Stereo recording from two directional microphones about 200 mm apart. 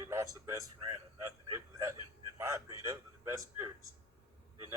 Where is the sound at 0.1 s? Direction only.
15° right (ahead or behind).